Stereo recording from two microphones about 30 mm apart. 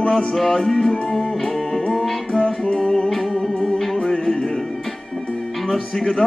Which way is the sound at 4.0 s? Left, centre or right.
Centre.